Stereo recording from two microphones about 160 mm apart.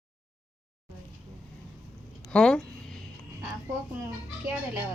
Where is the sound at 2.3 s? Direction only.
5° left (ahead or behind).